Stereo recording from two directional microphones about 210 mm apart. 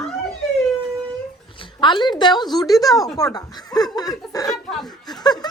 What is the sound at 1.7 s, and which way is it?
A woman's voice, 20° left (ahead or behind).